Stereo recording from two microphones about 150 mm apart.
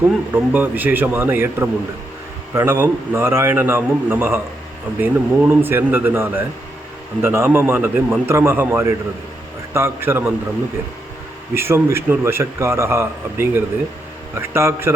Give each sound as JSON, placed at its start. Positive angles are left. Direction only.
{"t": 0.0, "sound": "a man's voice", "side_deg": -10}
{"t": 11.5, "sound": "a man's voice", "side_deg": -15}